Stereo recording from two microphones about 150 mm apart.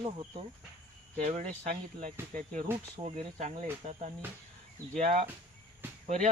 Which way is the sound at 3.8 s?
45° right (ahead or behind).